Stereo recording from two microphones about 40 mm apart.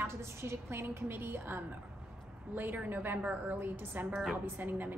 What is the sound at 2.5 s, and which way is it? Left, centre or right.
A woman's voice, right.